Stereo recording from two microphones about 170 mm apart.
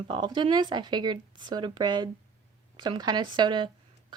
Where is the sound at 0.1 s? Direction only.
25° right (ahead or behind).